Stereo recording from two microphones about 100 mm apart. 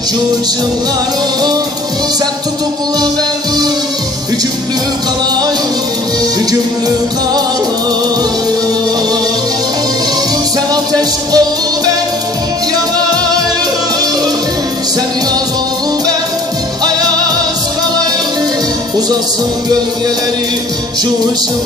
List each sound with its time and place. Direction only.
10.7 s music: 40° right (ahead or behind)